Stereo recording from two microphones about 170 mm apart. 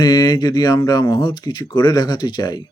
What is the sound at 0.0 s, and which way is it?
Speech, 25° left (ahead or behind).